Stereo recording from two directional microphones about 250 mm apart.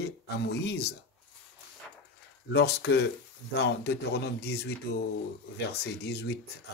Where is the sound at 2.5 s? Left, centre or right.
Left.